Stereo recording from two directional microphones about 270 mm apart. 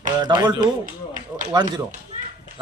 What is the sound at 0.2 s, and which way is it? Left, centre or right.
Speech, centre.